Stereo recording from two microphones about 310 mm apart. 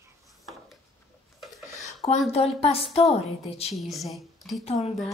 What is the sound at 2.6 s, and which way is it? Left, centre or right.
Speech, centre.